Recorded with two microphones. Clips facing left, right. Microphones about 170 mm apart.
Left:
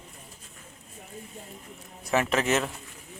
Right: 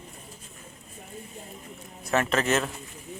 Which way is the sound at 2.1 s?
10° left (ahead or behind).